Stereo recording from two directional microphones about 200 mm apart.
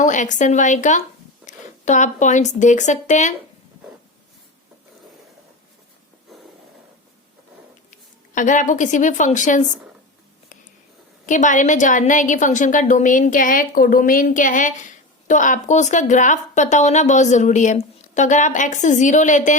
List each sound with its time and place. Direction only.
0.0 s a woman's voice: 40° left (ahead or behind)
8.4 s a woman's voice: 40° left (ahead or behind)
11.3 s a woman's voice: 40° left (ahead or behind)